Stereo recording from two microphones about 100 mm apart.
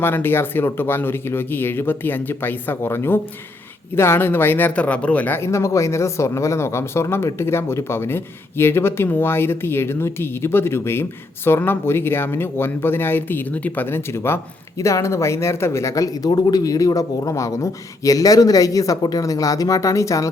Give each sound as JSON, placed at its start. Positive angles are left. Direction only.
{"t": 0.0, "sound": "speech", "side_deg": 20}